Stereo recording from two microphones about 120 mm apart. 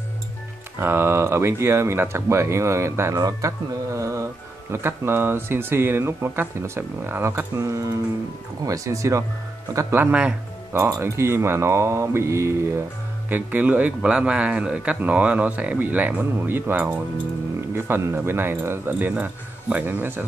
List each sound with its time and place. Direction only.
0.7 s speech: 20° right (ahead or behind)
10.1 s speech: 10° right (ahead or behind)
10.8 s speech: 20° right (ahead or behind)